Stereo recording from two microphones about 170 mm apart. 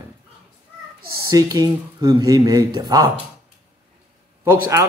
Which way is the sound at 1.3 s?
20° right (ahead or behind).